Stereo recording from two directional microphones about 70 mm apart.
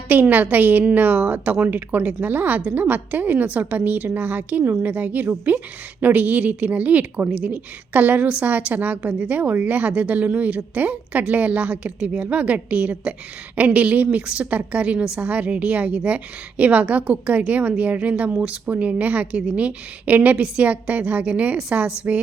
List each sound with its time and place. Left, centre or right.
0.1 s a woman's voice: right